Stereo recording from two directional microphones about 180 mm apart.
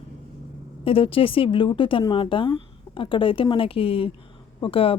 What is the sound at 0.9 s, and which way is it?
Speech, 30° left (ahead or behind).